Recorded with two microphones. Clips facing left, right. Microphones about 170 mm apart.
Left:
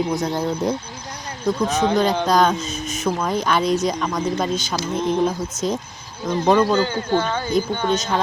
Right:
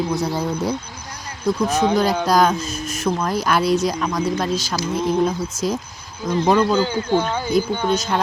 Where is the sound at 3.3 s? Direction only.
5° right (ahead or behind).